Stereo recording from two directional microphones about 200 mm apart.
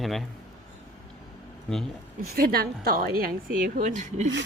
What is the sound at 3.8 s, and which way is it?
Speech, 35° right (ahead or behind).